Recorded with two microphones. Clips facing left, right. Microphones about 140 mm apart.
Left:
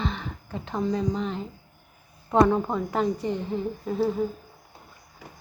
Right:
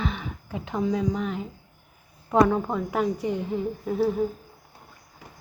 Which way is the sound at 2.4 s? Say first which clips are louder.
Left 1 dB; centre (ahead or behind).